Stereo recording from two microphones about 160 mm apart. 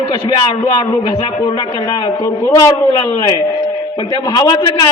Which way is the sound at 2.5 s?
20° left (ahead or behind).